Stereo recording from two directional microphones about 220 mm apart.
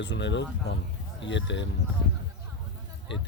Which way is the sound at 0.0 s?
55° left (ahead or behind).